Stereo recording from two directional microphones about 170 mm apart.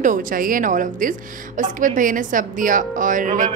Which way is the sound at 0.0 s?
50° right (ahead or behind).